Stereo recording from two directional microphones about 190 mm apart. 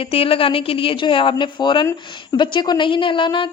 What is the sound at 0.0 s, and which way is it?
A woman's voice, 30° left (ahead or behind).